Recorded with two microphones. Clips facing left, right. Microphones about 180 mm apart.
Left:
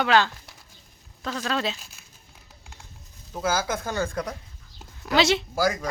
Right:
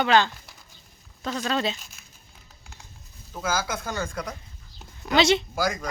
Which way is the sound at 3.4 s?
30° left (ahead or behind).